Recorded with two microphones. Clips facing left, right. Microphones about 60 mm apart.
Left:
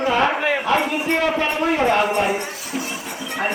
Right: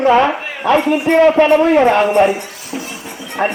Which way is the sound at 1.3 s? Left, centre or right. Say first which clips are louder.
Right 10 dB; right.